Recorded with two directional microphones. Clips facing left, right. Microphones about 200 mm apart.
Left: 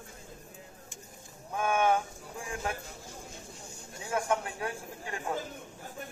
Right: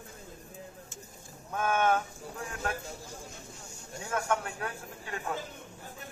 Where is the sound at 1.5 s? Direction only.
10° left (ahead or behind).